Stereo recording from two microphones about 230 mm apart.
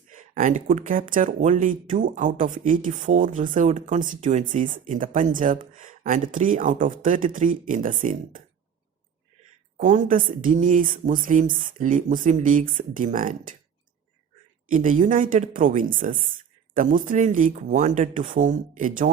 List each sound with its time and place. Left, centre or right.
0.1 s speech: right
9.7 s speech: right
14.7 s speech: right